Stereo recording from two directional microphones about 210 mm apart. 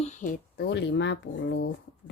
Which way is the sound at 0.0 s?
35° left (ahead or behind).